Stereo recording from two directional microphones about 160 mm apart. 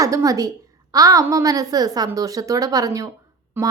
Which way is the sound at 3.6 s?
10° right (ahead or behind).